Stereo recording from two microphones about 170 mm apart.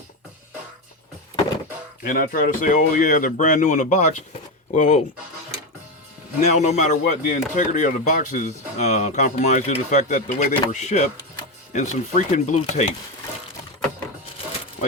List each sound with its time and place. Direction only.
2.0 s speech: 55° left (ahead or behind)
6.4 s speech: 45° left (ahead or behind)